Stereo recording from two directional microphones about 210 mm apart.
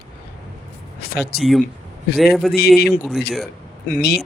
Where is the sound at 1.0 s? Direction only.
50° left (ahead or behind).